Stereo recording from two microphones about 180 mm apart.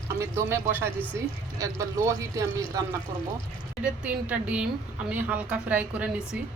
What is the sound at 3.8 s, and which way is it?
A woman's voice, 5° right (ahead or behind).